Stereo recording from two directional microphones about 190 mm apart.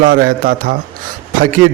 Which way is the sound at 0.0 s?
50° right (ahead or behind).